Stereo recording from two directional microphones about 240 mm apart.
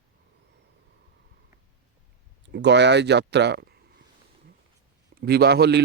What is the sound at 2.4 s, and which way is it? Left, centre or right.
A man's voice, right.